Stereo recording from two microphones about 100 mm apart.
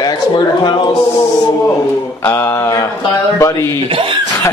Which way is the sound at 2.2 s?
25° left (ahead or behind).